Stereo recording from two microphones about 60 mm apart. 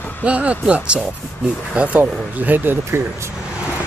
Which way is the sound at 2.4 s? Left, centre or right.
Right.